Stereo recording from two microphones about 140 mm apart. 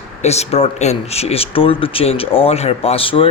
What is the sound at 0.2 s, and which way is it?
Speech, 50° left (ahead or behind).